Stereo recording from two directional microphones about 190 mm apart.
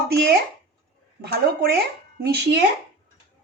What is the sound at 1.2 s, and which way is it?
Speech, 55° right (ahead or behind).